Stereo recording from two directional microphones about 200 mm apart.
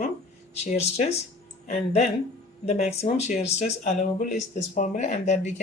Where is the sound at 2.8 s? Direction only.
30° left (ahead or behind).